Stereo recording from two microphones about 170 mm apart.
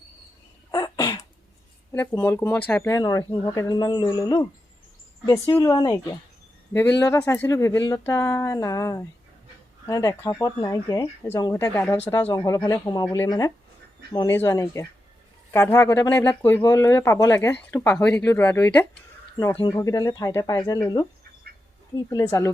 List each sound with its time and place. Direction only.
0.7 s sneeze: 25° left (ahead or behind)
1.9 s speech: 15° left (ahead or behind)
19.4 s speech: 20° left (ahead or behind)
22.1 s speech: 20° left (ahead or behind)